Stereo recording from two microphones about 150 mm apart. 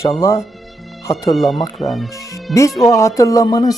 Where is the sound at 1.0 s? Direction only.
25° left (ahead or behind).